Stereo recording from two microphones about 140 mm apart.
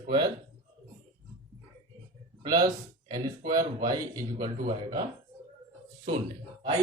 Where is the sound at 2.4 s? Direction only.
30° right (ahead or behind).